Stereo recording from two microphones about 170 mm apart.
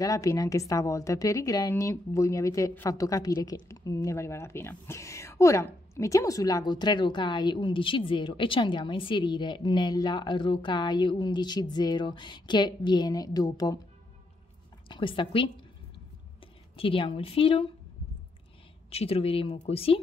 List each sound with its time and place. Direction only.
0.0 s a woman's voice: 20° left (ahead or behind)
14.9 s a woman's voice: 30° left (ahead or behind)
16.7 s speech: 35° left (ahead or behind)
18.9 s speech: 35° left (ahead or behind)